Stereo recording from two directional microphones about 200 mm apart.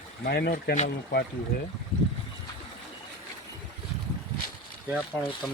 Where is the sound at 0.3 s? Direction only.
55° left (ahead or behind).